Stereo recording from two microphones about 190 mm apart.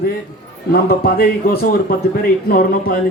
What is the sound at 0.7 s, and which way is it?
A man's voice, 55° left (ahead or behind).